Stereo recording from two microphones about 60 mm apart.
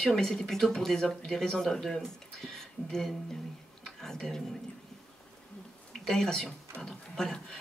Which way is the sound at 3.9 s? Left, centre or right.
Centre.